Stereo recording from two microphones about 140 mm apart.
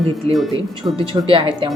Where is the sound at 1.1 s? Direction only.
35° right (ahead or behind).